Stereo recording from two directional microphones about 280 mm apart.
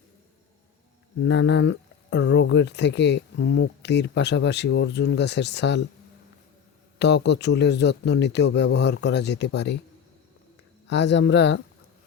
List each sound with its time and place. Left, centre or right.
1.2 s speech: left
7.0 s speech: left
10.8 s speech: left